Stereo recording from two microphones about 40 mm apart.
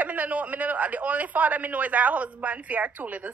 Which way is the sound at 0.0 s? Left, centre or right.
Right.